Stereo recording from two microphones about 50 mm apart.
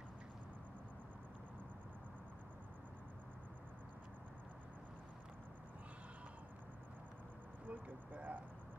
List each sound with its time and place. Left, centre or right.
7.7 s speech: right